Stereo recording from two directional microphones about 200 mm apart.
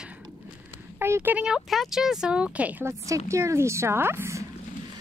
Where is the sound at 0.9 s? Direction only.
10° right (ahead or behind).